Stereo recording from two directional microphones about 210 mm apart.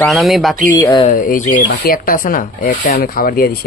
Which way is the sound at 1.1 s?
40° left (ahead or behind).